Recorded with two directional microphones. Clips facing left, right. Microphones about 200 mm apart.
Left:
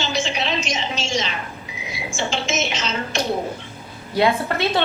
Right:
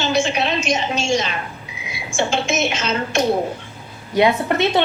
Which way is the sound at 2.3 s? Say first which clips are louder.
Right 2 dB; 55° right (ahead or behind).